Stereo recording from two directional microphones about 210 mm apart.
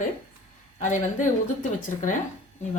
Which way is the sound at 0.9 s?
35° left (ahead or behind).